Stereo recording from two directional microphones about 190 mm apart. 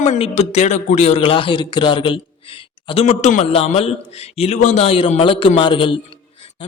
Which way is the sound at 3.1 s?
40° left (ahead or behind).